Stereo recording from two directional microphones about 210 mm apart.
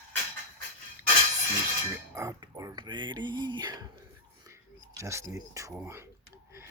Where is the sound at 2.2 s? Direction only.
15° right (ahead or behind).